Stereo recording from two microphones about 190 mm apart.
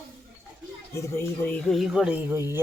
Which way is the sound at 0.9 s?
15° left (ahead or behind).